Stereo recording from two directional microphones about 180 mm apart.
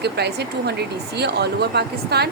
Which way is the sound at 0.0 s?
65° right (ahead or behind).